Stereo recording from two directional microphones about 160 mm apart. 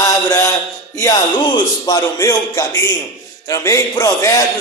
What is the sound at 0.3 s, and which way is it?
Mantra, 20° left (ahead or behind).